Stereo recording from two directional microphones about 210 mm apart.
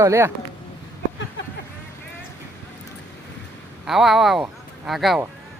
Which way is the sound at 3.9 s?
Centre (ahead or behind).